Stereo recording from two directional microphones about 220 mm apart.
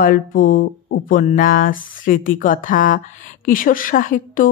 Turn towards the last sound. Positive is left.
turn(degrees=35)  # may be behind; listen again after turning